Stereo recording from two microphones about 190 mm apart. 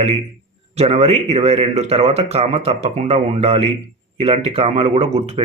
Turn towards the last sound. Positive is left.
turn(degrees=-30)  # may be behind; listen again after turning